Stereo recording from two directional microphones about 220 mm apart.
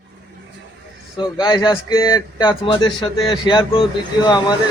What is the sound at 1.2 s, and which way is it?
Speech, 20° left (ahead or behind).